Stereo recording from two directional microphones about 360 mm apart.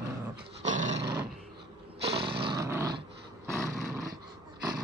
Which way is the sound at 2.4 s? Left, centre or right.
Centre.